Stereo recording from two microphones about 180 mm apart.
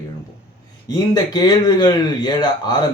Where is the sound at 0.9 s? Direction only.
25° left (ahead or behind).